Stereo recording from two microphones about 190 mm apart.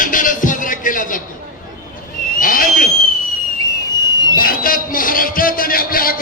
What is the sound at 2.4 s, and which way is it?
Owl, 45° left (ahead or behind).